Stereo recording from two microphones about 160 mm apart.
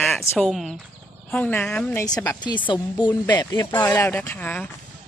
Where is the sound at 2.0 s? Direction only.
20° left (ahead or behind).